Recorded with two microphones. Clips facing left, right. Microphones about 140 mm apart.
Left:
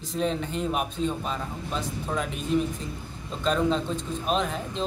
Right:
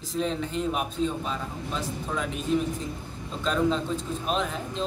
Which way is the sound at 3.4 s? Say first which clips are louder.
Left 1 dB; centre (ahead or behind).